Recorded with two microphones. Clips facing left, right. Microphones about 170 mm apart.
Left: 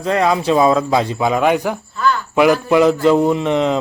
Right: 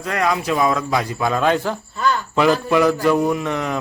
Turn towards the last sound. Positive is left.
turn(degrees=20)  # may be behind; listen again after turning